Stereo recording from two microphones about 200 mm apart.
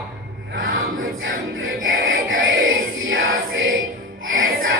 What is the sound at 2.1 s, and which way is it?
Music, 80° right.